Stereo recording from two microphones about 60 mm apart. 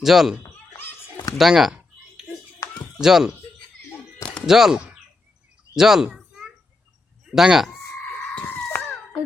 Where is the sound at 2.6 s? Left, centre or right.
Left.